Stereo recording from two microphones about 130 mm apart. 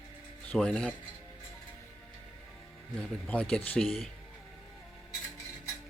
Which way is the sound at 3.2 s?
10° left (ahead or behind).